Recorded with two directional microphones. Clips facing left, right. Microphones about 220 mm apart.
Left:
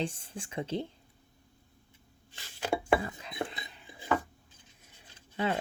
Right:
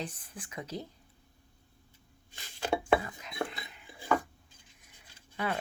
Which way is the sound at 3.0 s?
30° left (ahead or behind).